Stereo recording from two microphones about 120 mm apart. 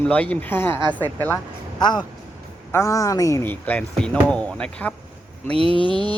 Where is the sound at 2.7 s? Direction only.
25° left (ahead or behind).